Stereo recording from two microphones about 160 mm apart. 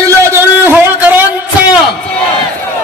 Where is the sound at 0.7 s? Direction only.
10° right (ahead or behind).